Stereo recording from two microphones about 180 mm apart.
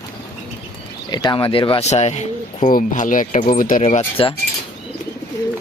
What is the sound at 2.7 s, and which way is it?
Speech, 45° left (ahead or behind).